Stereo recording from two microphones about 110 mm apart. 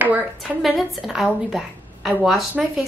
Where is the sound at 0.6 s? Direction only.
5° right (ahead or behind).